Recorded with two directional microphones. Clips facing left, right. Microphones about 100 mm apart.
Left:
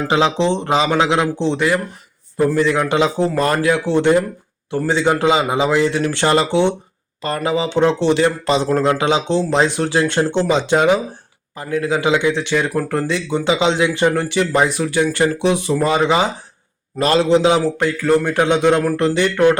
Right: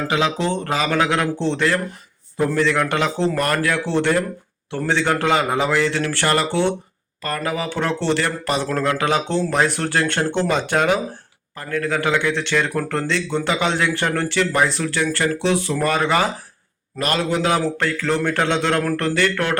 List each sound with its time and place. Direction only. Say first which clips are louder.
0.1 s speech: left 6 dB; 30° left (ahead or behind)
17.6 s speech: left 3 dB; 15° left (ahead or behind)